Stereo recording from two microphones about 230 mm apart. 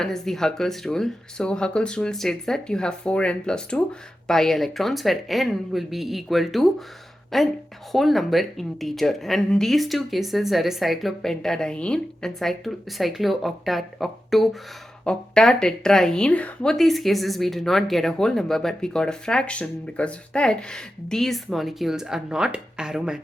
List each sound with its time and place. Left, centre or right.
0.0 s speech: centre